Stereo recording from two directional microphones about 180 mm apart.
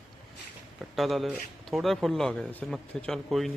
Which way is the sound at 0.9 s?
Centre (ahead or behind).